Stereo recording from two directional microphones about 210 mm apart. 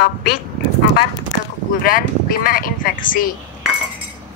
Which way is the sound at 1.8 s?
45° left (ahead or behind).